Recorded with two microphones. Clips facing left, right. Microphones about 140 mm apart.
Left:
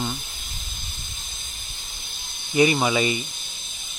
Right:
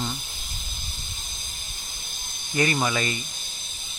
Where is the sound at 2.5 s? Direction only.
15° left (ahead or behind).